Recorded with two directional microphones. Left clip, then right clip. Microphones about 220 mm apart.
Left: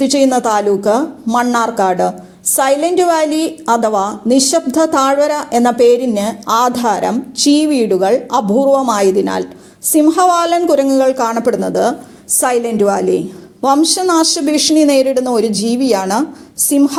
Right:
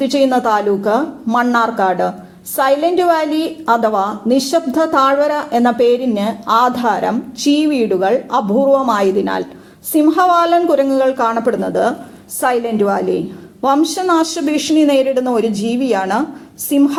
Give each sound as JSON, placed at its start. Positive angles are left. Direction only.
{"t": 0.0, "sound": "a woman's voice", "side_deg": 35}